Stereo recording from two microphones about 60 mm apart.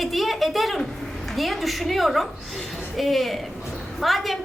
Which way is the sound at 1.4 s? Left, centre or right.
Centre.